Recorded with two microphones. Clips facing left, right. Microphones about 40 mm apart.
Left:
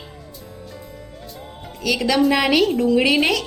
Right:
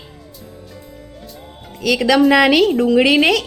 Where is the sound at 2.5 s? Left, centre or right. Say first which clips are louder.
Right 3 dB; right.